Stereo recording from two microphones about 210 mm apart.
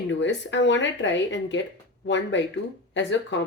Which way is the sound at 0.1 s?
60° left (ahead or behind).